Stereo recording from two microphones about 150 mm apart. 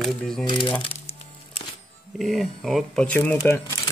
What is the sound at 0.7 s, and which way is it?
Crumpling, 40° left (ahead or behind).